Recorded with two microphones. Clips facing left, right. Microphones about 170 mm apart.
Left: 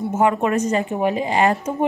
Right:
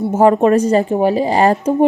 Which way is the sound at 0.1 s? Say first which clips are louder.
Right 8 dB; 35° right (ahead or behind).